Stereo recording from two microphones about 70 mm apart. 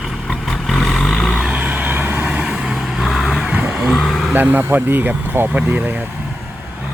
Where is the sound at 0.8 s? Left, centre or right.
Centre.